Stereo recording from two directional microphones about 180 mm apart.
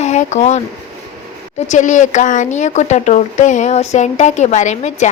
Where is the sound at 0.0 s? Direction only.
40° left (ahead or behind).